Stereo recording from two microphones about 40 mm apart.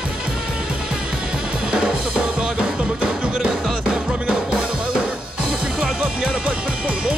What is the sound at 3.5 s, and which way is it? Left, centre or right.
Music, centre.